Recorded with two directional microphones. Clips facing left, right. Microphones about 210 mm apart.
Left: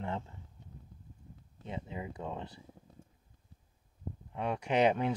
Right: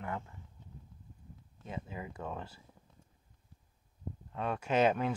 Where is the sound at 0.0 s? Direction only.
25° left (ahead or behind).